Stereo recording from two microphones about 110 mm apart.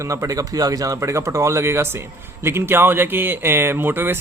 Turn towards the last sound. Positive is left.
turn(degrees=-20)  # may be behind; listen again after turning